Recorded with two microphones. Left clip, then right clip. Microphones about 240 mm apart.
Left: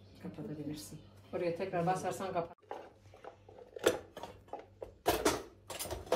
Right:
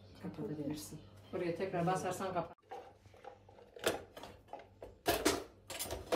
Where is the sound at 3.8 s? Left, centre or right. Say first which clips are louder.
Left 5 dB; left.